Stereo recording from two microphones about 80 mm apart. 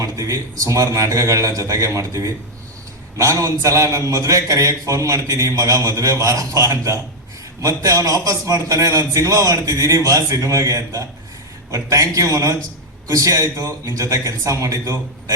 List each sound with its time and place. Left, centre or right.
0.0 s a man's voice: right